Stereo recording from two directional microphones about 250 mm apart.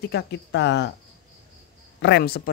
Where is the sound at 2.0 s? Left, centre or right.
Left.